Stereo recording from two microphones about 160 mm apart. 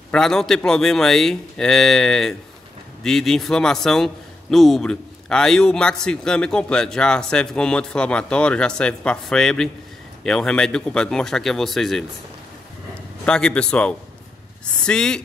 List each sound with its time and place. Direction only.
0.1 s a man's voice: 5° left (ahead or behind)
13.2 s a man's voice: 5° left (ahead or behind)